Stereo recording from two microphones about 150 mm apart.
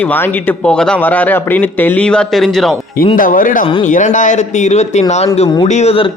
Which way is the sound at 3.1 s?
65° left (ahead or behind).